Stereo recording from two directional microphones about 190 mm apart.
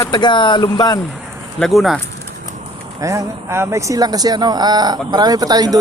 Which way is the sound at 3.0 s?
15° right (ahead or behind).